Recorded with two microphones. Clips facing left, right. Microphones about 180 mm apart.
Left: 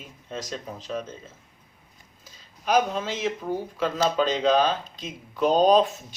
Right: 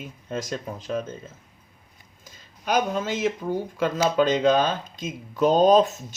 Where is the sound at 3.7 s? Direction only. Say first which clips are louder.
Right 2 dB; 50° right (ahead or behind).